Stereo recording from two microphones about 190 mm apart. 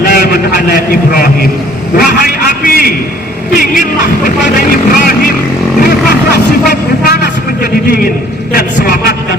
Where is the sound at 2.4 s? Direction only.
50° left (ahead or behind).